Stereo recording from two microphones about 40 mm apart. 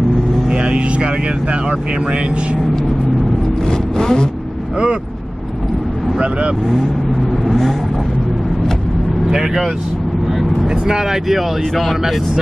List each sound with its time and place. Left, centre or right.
0.5 s speech: right
3.6 s vehicle: centre
6.1 s speech: right
7.4 s vehicle: centre
10.9 s speech: centre
11.2 s speech: centre